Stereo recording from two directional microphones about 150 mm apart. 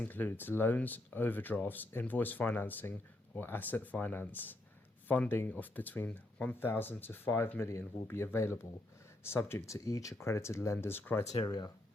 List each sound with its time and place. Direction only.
0.0 s speech: 10° left (ahead or behind)
11.3 s speech: 25° left (ahead or behind)